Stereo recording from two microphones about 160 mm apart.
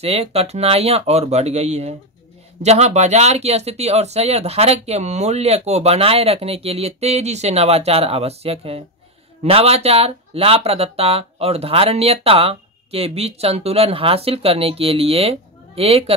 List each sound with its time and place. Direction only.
0.0 s speech: 40° right (ahead or behind)